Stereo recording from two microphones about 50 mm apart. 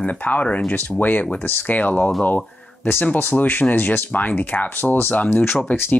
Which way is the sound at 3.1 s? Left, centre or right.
Left.